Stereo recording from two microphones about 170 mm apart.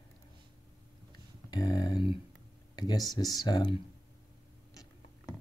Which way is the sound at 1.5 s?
25° left (ahead or behind).